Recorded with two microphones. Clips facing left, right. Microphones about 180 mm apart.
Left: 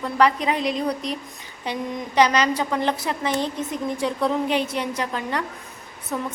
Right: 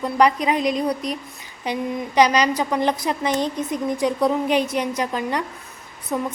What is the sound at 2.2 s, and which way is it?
A woman's voice, 15° right (ahead or behind).